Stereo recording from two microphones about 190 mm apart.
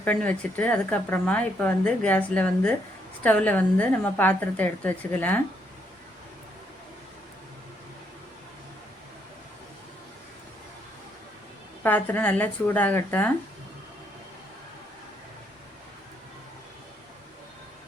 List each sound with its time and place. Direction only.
0.0 s a woman's voice: 10° left (ahead or behind)
11.8 s a woman's voice: 10° left (ahead or behind)